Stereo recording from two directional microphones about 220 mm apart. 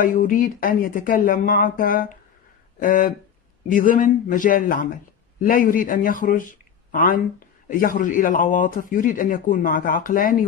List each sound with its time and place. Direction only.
0.0 s a man's voice: 40° left (ahead or behind)